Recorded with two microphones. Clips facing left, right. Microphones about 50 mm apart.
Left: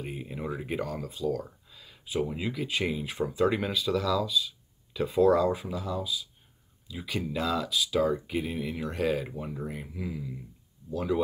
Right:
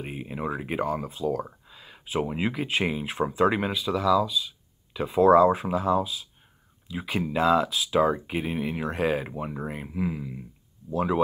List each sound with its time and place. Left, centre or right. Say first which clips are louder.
0.0 s speech: right 4 dB; right
5.2 s speech: right 6 dB; right